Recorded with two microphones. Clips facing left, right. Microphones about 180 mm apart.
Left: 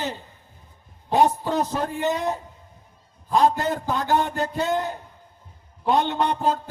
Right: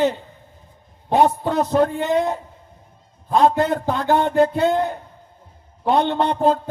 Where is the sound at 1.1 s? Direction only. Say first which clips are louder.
Right 3 dB; 60° right (ahead or behind).